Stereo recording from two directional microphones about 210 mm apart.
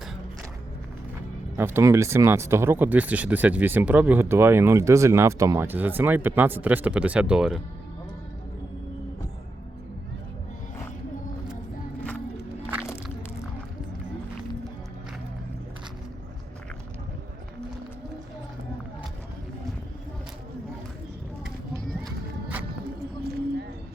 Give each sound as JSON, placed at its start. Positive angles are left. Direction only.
{"t": 1.5, "sound": "speech", "side_deg": -10}
{"t": 22.0, "sound": "music", "side_deg": -5}
{"t": 23.2, "sound": "a sound", "side_deg": -50}